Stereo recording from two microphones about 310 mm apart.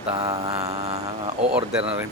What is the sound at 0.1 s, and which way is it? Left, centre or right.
Speech, centre.